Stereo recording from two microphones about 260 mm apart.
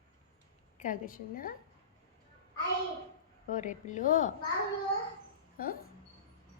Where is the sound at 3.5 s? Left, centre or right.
Left.